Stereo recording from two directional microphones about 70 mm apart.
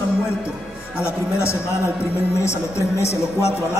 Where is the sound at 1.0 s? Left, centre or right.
Left.